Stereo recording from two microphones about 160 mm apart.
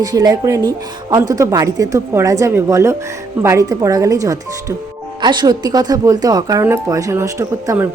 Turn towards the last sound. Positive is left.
turn(degrees=-15)  # may be behind; listen again after turning